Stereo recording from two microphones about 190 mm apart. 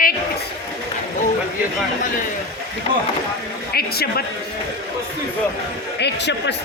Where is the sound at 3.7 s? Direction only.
55° left (ahead or behind).